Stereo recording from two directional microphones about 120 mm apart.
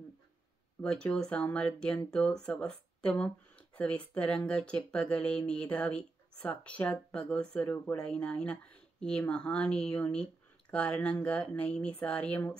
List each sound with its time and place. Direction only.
0.7 s speech: 10° left (ahead or behind)
7.6 s speech: 25° left (ahead or behind)
7.9 s speech: 10° left (ahead or behind)